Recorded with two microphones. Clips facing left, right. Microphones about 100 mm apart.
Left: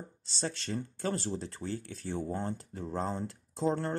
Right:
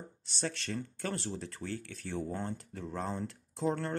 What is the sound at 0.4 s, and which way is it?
Speech, 25° left (ahead or behind).